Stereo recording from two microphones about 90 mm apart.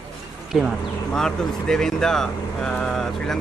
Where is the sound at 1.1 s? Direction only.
10° left (ahead or behind).